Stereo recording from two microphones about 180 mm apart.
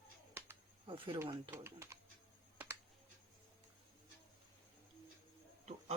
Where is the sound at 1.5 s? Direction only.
15° right (ahead or behind).